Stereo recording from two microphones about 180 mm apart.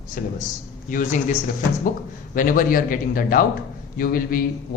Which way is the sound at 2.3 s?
50° left (ahead or behind).